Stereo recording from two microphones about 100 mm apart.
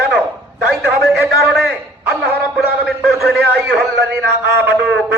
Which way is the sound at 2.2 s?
Centre (ahead or behind).